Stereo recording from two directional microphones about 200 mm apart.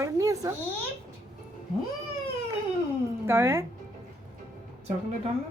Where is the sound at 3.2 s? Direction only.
10° right (ahead or behind).